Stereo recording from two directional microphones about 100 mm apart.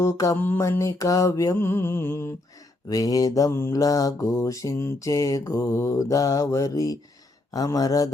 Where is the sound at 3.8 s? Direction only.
35° left (ahead or behind).